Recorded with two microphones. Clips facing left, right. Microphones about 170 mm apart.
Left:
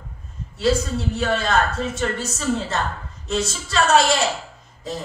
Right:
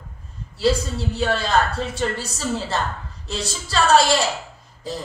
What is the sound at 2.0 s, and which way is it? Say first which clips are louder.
A woman's voice: even; 35° right (ahead or behind).